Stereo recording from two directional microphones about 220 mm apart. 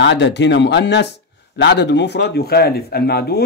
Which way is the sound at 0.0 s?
55° left (ahead or behind).